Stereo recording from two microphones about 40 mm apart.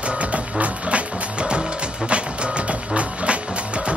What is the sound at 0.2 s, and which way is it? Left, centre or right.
Music, right.